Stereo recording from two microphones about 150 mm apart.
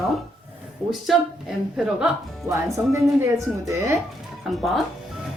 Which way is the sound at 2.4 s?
20° right (ahead or behind).